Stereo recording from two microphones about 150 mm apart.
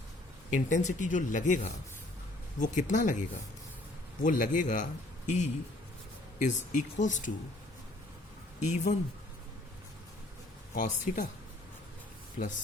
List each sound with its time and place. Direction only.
0.5 s a man's voice: 55° left (ahead or behind)
8.7 s speech: 55° left (ahead or behind)
10.8 s a man's voice: 65° left (ahead or behind)